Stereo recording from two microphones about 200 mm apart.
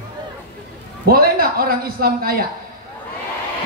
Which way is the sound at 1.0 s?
50° right (ahead or behind).